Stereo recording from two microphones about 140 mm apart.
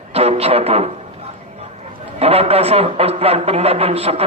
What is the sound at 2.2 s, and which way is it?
A man's voice, 45° right (ahead or behind).